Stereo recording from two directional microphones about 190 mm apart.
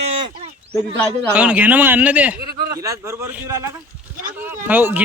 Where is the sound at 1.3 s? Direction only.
5° right (ahead or behind).